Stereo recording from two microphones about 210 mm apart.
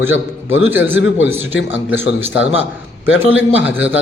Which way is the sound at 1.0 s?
60° left (ahead or behind).